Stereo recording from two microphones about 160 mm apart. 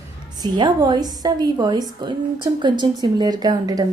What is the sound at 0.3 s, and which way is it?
A woman's voice, 25° right (ahead or behind).